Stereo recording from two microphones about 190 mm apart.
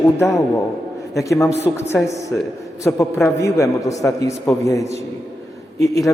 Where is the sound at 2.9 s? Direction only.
10° left (ahead or behind).